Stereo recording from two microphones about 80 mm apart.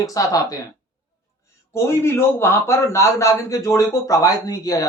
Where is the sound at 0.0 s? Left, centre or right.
Left.